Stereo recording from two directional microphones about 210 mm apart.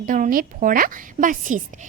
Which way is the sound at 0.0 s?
40° right (ahead or behind).